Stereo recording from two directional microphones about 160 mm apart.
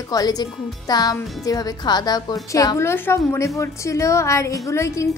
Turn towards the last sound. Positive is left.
turn(degrees=20)  # may be behind; listen again after turning